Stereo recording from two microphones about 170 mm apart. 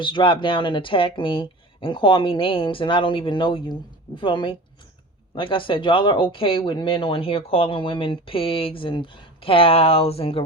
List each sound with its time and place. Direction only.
0.0 s speech: 30° left (ahead or behind)